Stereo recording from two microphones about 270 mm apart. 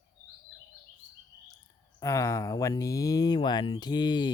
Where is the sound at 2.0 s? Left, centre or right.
Centre.